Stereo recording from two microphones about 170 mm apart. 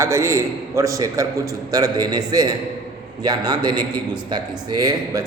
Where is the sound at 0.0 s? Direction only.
15° right (ahead or behind).